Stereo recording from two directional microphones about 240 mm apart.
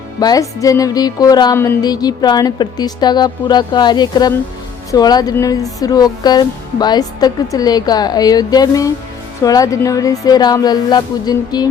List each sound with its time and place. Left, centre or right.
0.2 s music: centre